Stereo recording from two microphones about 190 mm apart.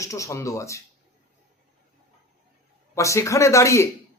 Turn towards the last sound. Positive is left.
turn(degrees=15)  # may be behind; listen again after turning